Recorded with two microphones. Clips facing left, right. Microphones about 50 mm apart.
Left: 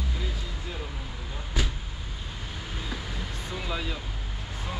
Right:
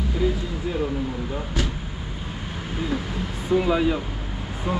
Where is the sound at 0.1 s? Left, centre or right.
Centre.